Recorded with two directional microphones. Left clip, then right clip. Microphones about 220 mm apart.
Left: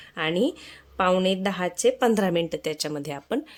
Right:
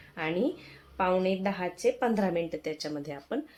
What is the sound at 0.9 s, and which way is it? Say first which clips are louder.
A woman's voice: left 5 dB; 45° left (ahead or behind).